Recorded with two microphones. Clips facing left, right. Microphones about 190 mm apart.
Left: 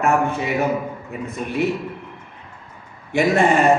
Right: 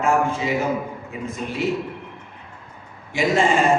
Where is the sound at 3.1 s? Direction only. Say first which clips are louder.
Left 3 dB; 60° left (ahead or behind).